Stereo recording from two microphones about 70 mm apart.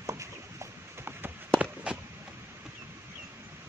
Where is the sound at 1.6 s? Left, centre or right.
Centre.